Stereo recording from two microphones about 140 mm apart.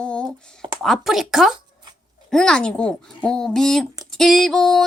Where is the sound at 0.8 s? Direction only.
Centre (ahead or behind).